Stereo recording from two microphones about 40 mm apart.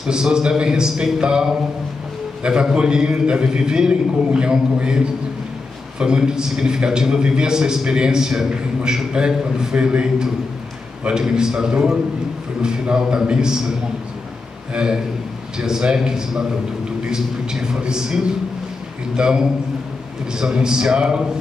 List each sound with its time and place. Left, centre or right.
0.0 s a man's voice: centre